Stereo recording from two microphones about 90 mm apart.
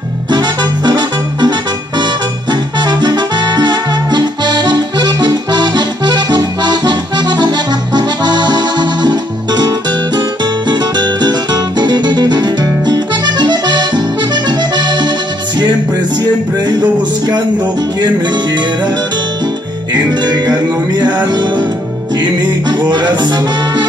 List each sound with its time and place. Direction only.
0.3 s music: 50° right (ahead or behind)
2.5 s music: 55° right (ahead or behind)
12.6 s accordion: 45° right (ahead or behind)
19.9 s music: 55° right (ahead or behind)